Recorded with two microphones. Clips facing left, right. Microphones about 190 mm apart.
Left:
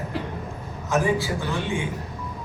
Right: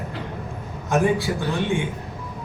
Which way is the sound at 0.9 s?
60° right (ahead or behind).